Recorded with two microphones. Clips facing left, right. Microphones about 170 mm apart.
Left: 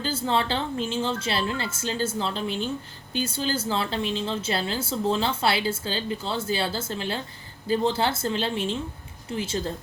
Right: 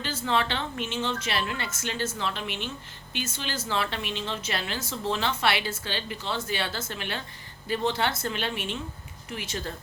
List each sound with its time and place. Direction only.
0.0 s speech: 30° left (ahead or behind)